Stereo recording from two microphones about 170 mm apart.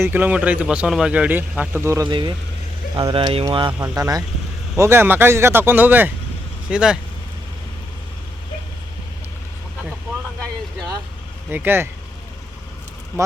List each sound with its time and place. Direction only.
0.0 s speech: 10° right (ahead or behind)
2.0 s speech: 30° right (ahead or behind); by 7.0 s 5° right (ahead or behind)
11.5 s speech: 10° right (ahead or behind)